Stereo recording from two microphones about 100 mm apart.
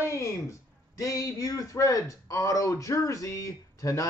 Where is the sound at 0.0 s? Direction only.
30° left (ahead or behind).